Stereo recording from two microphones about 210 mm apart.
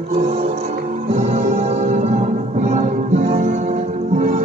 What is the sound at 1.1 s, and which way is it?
Music, 35° right (ahead or behind).